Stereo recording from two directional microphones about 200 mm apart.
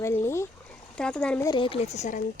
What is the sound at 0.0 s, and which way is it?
A woman's voice, 15° left (ahead or behind).